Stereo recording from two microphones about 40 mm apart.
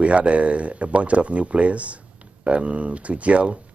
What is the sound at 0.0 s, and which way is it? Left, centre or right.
Speech, right.